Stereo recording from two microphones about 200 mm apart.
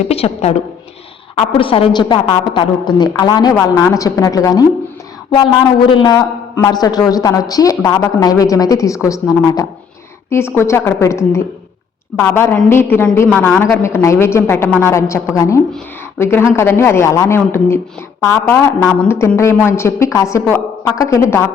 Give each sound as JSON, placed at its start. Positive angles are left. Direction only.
{"t": 0.1, "sound": "a woman's voice", "side_deg": 30}
{"t": 5.9, "sound": "a woman's voice", "side_deg": 20}